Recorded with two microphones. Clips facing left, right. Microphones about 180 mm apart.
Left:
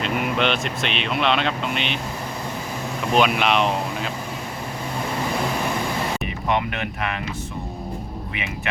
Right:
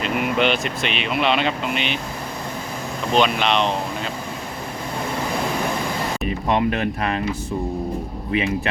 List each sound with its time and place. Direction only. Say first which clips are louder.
0.0 s speech: right 2 dB; centre (ahead or behind)
3.1 s speech: even; 5° left (ahead or behind)
6.5 s speech: right 4 dB; 35° right (ahead or behind)